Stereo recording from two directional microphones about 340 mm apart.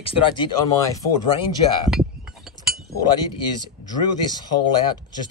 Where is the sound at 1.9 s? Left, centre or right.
Centre.